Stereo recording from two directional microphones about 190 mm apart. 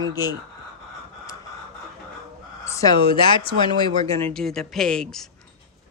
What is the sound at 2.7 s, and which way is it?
Speech, 20° left (ahead or behind).